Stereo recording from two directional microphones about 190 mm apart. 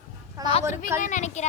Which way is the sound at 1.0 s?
40° left (ahead or behind).